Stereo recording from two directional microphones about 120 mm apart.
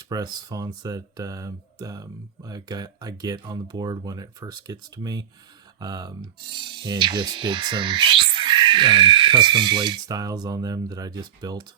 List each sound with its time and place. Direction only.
0.1 s speech: 35° right (ahead or behind)
6.5 s speech: 40° right (ahead or behind)